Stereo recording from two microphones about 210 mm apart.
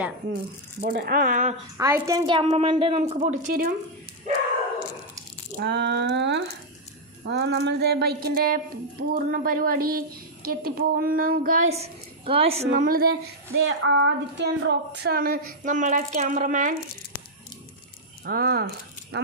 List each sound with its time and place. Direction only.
0.8 s a woman's voice: 50° right (ahead or behind)
1.8 s a woman's voice: 15° right (ahead or behind); by 3.7 s 40° right (ahead or behind)
5.5 s a sound: 50° right (ahead or behind)
7.3 s a woman's voice: 55° right (ahead or behind)
11.7 s a woman's voice: 30° right (ahead or behind); by 13.1 s 45° right (ahead or behind)
13.7 s a woman's voice: 60° right (ahead or behind); by 16.7 s 40° right (ahead or behind)
18.3 s a woman's voice: 45° right (ahead or behind)